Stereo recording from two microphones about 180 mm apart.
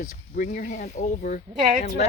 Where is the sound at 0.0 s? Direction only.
45° left (ahead or behind).